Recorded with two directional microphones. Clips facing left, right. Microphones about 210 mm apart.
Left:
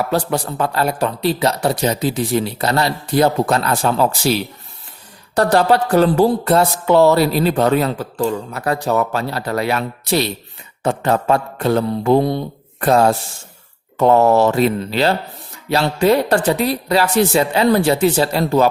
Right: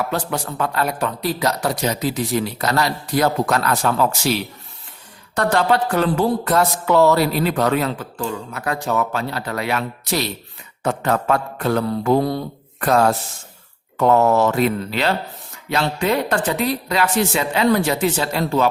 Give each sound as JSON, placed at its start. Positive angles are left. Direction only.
{"t": 0.1, "sound": "speech", "side_deg": 35}